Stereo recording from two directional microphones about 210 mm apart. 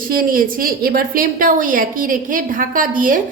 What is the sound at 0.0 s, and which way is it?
A woman's voice, 40° right (ahead or behind).